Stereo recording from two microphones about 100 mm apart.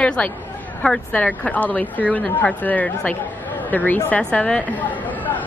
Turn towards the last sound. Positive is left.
turn(degrees=10)  # may be behind; listen again after turning